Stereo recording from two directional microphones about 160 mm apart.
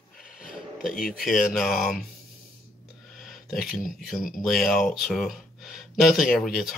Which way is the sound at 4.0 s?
Centre (ahead or behind).